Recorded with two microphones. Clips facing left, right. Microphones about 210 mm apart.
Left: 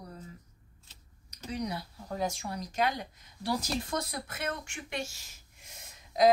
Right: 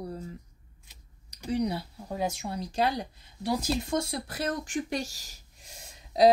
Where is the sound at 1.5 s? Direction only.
30° right (ahead or behind).